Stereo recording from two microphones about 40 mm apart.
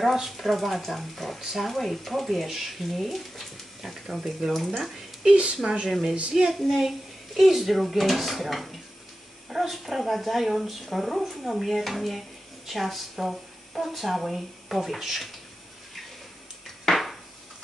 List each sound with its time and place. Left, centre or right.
0.0 s speech: centre
5.3 s a woman's voice: right
5.9 s speech: centre
6.3 s child singing: centre
6.7 s speech: centre
16.9 s a sound: centre